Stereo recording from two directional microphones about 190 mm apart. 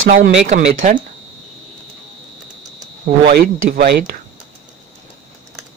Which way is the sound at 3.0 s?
55° right (ahead or behind).